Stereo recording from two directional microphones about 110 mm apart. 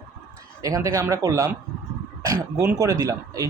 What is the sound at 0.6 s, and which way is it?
Speech, 30° right (ahead or behind).